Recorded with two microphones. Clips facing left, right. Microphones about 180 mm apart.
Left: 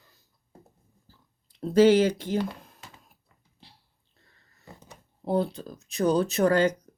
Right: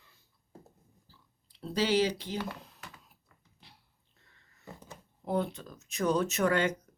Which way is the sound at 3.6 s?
30° left (ahead or behind).